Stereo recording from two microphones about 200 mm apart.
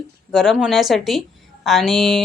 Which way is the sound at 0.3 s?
Centre (ahead or behind).